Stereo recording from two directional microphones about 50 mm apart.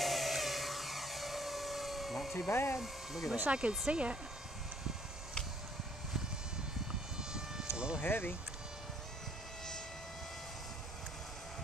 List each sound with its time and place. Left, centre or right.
0.0 s a sound: centre
2.5 s speech: left
2.8 s speech: centre
3.4 s speech: right
7.2 s vehicle: centre
7.7 s music: centre
8.0 s speech: left